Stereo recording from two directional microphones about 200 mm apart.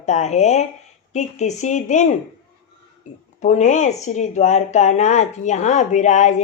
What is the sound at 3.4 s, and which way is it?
Speech, 35° left (ahead or behind).